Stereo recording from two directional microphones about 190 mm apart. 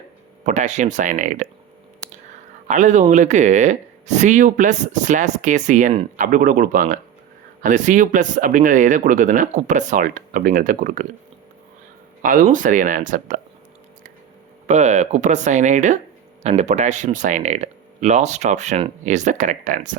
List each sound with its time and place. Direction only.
0.4 s speech: 40° right (ahead or behind)
2.6 s speech: 40° right (ahead or behind)
12.2 s speech: 45° right (ahead or behind)
14.7 s speech: 40° right (ahead or behind)